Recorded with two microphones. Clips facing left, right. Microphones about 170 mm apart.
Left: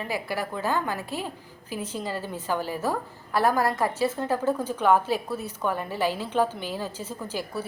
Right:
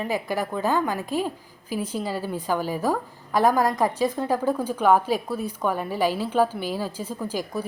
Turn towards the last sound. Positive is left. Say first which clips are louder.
# right 3 dB
turn(degrees=-15)  # may be behind; listen again after turning